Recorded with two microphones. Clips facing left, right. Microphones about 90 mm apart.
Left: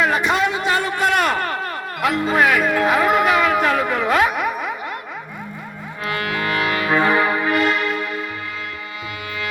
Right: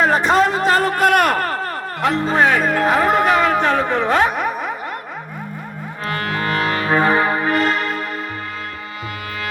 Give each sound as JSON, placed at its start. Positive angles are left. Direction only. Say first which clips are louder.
{"t": 0.0, "sound": "a man's voice", "louder": "right 3 dB", "side_deg": -35}
{"t": 6.1, "sound": "music", "louder": "right 1 dB", "side_deg": -40}